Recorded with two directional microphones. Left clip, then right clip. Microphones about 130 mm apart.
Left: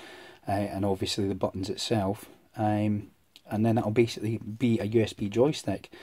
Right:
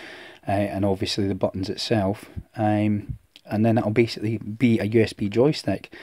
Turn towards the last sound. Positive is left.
turn(degrees=-35)  # may be behind; listen again after turning